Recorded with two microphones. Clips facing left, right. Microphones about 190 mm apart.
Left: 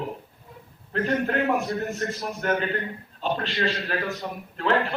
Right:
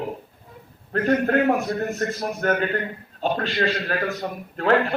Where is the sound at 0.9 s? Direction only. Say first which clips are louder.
Right 5 dB; 45° right (ahead or behind).